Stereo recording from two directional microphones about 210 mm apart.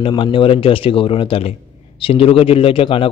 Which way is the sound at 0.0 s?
25° left (ahead or behind).